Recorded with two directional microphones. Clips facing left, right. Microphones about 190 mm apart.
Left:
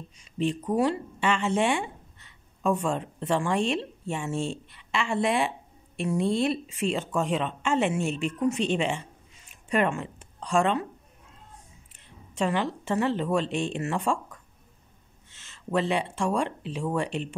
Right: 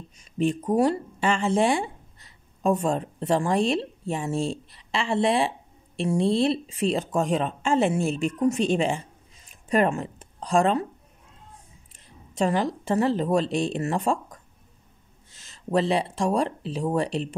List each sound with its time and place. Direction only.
0.2 s speech: 45° right (ahead or behind)
11.9 s a woman's voice: 40° right (ahead or behind)